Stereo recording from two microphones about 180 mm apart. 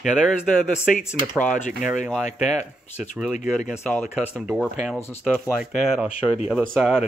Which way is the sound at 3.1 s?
5° right (ahead or behind).